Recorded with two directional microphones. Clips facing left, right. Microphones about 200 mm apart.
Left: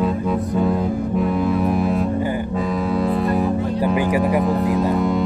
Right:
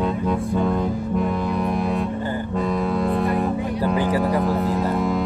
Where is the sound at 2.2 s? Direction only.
10° left (ahead or behind).